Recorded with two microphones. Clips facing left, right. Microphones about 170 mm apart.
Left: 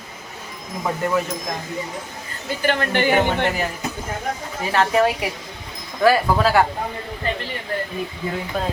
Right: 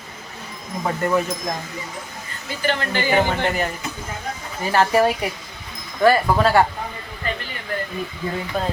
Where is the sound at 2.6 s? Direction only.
55° left (ahead or behind).